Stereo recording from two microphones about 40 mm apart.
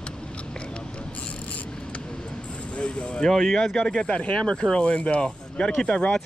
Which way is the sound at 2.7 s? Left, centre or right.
Left.